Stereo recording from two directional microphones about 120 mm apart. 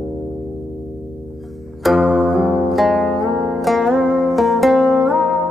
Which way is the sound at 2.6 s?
Centre (ahead or behind).